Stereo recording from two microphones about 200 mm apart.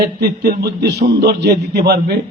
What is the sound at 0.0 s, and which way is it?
A man's voice, 55° right (ahead or behind).